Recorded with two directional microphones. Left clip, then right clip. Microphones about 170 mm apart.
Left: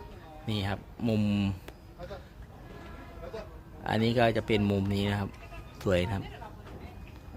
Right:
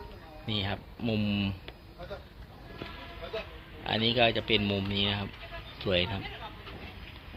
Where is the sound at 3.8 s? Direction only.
40° left (ahead or behind).